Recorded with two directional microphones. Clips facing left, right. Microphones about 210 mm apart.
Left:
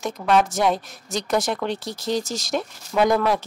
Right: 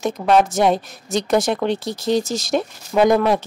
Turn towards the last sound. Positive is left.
turn(degrees=-20)  # may be behind; listen again after turning